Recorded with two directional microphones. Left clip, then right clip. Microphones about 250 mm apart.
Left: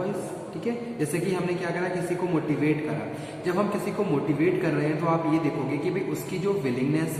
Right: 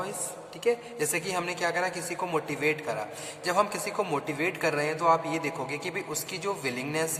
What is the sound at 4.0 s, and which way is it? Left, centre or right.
A man's voice, right.